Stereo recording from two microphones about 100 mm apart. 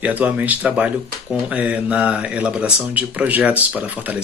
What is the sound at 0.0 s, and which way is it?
Speech, 15° right (ahead or behind).